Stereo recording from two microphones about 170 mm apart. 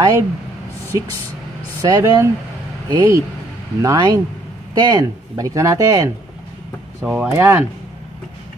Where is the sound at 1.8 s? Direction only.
20° right (ahead or behind).